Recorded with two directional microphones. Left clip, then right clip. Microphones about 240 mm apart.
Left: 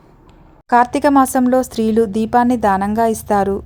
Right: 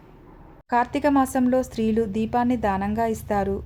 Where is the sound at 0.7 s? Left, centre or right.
Left.